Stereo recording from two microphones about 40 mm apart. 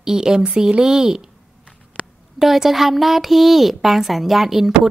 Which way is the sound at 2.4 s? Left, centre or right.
Centre.